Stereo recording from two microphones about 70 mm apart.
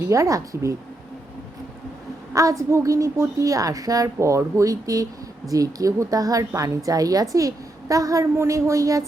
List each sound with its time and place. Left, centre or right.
0.1 s a woman's voice: right
2.3 s a woman's voice: right